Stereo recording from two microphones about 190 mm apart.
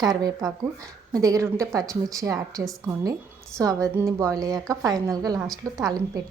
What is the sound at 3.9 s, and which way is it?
A woman's voice, 15° right (ahead or behind).